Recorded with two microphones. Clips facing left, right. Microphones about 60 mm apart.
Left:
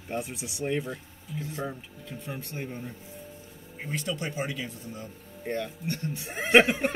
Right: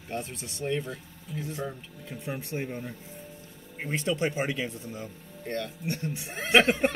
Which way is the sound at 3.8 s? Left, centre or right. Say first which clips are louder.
Right 5 dB; right.